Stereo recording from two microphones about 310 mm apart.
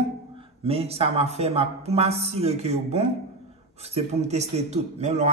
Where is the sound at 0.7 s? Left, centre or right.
Centre.